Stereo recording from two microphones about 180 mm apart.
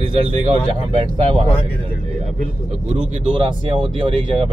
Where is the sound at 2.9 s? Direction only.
30° right (ahead or behind).